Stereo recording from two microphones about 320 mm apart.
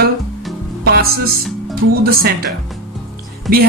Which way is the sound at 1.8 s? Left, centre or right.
Right.